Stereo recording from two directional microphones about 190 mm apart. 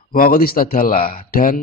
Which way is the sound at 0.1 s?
50° left (ahead or behind).